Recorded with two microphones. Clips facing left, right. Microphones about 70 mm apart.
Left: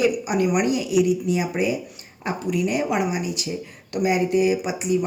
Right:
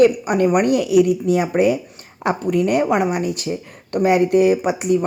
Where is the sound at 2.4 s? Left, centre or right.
Right.